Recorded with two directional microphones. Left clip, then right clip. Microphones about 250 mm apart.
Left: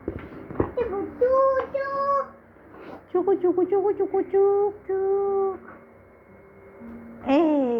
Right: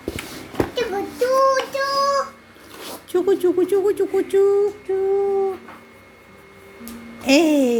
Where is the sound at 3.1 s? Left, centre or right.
Right.